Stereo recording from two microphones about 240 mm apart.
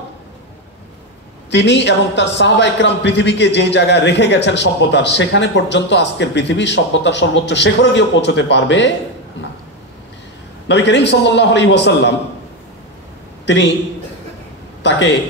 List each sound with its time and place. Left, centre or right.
1.5 s a man's voice: left
10.7 s a man's voice: left
13.5 s a man's voice: left
14.8 s speech: left